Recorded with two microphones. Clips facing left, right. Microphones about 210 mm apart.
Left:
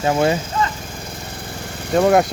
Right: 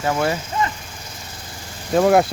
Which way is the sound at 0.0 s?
20° left (ahead or behind).